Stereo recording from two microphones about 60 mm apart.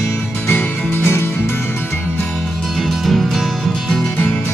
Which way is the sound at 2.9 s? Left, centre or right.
Centre.